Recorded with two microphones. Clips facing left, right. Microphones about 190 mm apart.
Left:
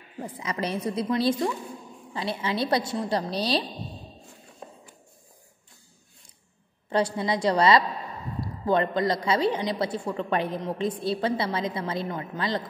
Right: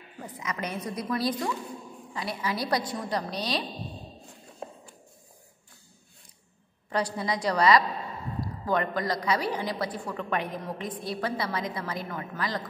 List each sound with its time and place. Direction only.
0.2 s a woman's voice: 30° left (ahead or behind)
6.9 s a woman's voice: 25° left (ahead or behind)